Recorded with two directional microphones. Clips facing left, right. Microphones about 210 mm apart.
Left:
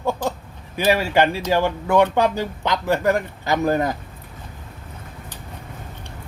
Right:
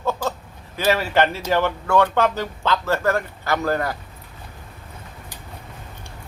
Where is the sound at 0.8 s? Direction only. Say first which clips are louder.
Left 1 dB; 15° left (ahead or behind).